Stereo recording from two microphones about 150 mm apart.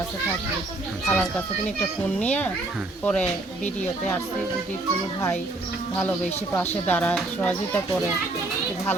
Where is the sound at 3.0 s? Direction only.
5° left (ahead or behind).